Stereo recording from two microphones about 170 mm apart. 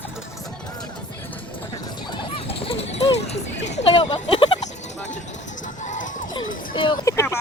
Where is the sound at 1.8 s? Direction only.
25° left (ahead or behind).